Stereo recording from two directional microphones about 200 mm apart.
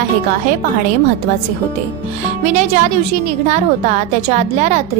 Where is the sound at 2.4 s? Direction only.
35° right (ahead or behind).